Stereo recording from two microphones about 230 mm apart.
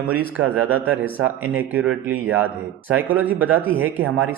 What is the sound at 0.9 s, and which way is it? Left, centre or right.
Speech, right.